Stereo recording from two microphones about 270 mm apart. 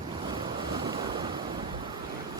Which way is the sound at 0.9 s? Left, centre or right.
Centre.